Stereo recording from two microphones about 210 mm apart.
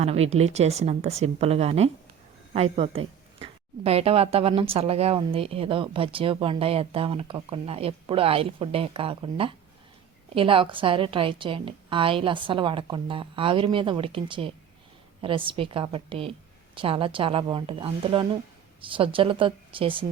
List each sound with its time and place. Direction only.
0.0 s speech: 30° right (ahead or behind)